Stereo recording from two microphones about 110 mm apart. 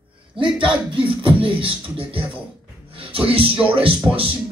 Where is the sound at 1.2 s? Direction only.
55° right (ahead or behind).